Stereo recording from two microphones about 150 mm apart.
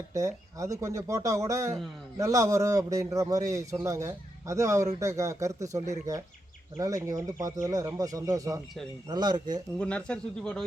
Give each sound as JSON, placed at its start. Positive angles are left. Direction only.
{"t": 0.1, "sound": "a man's voice", "side_deg": -20}
{"t": 9.7, "sound": "speech", "side_deg": 5}